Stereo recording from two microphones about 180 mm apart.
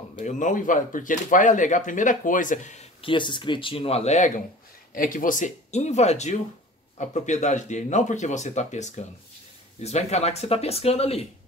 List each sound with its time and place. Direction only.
0.2 s speech: 45° left (ahead or behind)
4.9 s speech: 50° left (ahead or behind); by 11.2 s 35° left (ahead or behind)